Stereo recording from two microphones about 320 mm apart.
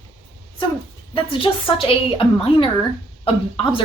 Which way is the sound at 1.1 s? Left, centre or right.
Centre.